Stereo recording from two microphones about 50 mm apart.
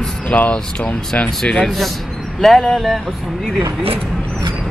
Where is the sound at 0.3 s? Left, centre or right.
Left.